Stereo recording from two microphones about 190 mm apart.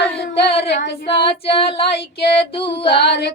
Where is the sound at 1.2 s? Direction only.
30° left (ahead or behind).